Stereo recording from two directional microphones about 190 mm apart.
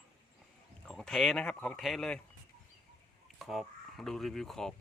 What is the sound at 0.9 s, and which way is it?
Speech, centre (ahead or behind).